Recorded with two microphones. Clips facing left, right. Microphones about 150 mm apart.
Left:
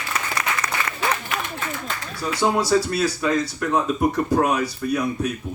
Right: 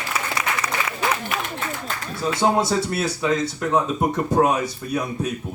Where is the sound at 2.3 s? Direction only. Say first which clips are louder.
Left 1 dB; 25° right (ahead or behind).